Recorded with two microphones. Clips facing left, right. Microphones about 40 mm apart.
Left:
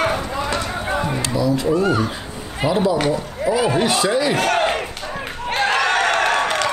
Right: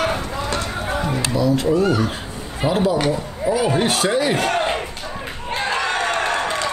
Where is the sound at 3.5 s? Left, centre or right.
Right.